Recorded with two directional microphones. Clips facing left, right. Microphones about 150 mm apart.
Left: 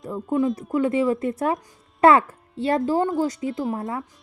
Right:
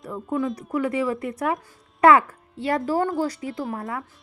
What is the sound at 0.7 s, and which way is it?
A woman's voice, 25° left (ahead or behind).